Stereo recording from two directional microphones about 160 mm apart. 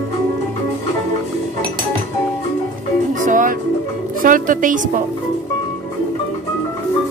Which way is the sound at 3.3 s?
55° right (ahead or behind).